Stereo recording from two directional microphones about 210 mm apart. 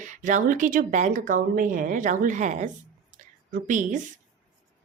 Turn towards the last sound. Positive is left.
turn(degrees=-35)  # may be behind; listen again after turning